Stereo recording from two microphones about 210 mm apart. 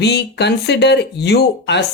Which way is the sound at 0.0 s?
50° left (ahead or behind).